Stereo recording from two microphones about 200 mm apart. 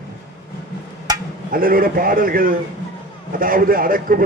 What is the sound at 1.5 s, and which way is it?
A man's voice, 45° right (ahead or behind).